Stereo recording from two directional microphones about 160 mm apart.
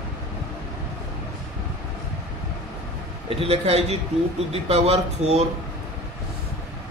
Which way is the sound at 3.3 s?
35° right (ahead or behind).